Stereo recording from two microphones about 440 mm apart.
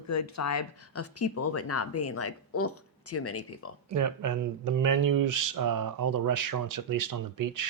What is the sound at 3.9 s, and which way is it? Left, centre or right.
Speech, right.